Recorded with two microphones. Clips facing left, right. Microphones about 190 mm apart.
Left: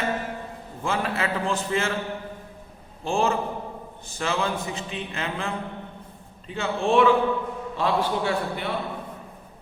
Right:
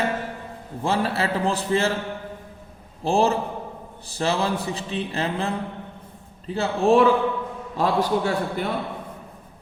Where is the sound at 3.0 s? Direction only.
35° right (ahead or behind).